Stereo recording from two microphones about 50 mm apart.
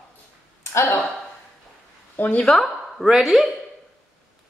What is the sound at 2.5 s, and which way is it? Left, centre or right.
Speech, centre.